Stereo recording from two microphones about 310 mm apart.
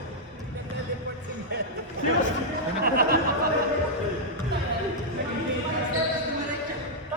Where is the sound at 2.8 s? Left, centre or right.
Right.